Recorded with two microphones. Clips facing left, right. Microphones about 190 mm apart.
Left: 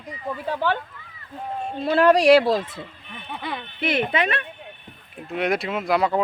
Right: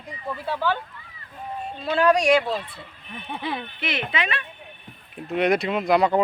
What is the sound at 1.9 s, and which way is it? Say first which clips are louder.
Speech: left 4 dB; 30° left (ahead or behind).